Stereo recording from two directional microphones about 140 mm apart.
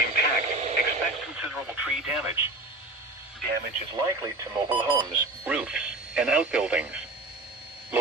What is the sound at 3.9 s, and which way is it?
Speech, 30° right (ahead or behind).